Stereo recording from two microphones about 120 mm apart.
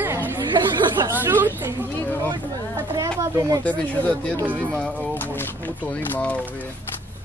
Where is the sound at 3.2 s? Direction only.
30° right (ahead or behind).